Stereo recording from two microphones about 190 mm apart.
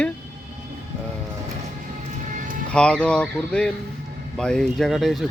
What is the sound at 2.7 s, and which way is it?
Speech, 5° left (ahead or behind).